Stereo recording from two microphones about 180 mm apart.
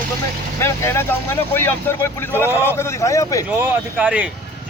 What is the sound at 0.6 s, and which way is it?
Speech, 15° left (ahead or behind).